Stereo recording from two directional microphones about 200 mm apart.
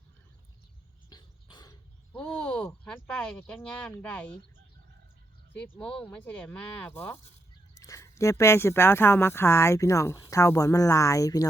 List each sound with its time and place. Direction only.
1.1 s a sound: 20° left (ahead or behind)
2.3 s speech: 5° left (ahead or behind)
5.5 s speech: 10° left (ahead or behind)